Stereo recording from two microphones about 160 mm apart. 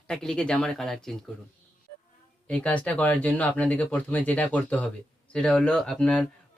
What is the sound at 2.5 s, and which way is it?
A man's voice, 10° left (ahead or behind).